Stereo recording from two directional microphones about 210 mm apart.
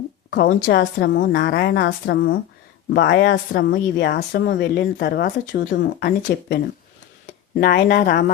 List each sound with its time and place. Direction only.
0.4 s speech: 55° left (ahead or behind)
7.6 s speech: 50° left (ahead or behind)